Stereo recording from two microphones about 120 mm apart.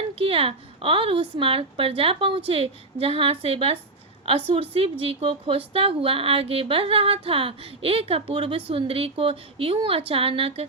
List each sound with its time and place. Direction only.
0.2 s a woman's voice: 50° right (ahead or behind)